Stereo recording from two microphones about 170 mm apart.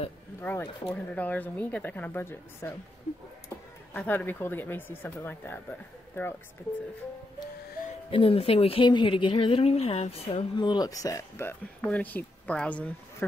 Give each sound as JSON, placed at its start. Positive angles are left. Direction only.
{"t": 0.4, "sound": "speech", "side_deg": 10}
{"t": 8.1, "sound": "speech", "side_deg": 35}